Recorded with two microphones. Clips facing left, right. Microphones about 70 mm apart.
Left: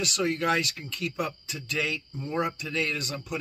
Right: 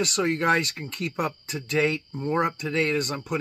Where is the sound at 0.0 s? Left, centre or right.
Right.